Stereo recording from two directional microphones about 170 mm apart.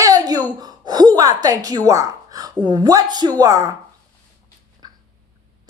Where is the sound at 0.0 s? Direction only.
20° right (ahead or behind).